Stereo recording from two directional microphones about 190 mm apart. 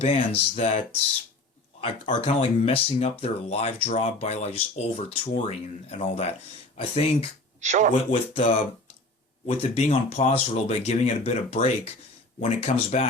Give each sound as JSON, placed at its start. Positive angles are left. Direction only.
{"t": 0.0, "sound": "speech", "side_deg": 30}
{"t": 1.8, "sound": "speech", "side_deg": 30}
{"t": 7.6, "sound": "speech", "side_deg": -40}
{"t": 8.1, "sound": "speech", "side_deg": 30}